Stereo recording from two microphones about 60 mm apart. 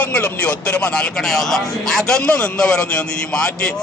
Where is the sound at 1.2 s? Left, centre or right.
Centre.